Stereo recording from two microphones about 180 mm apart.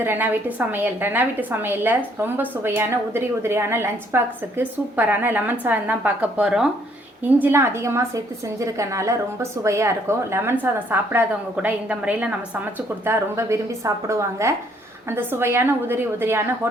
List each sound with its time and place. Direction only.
0.0 s a woman's voice: 10° right (ahead or behind)